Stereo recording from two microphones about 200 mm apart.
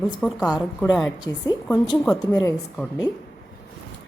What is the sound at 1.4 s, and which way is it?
A woman's voice, 20° left (ahead or behind).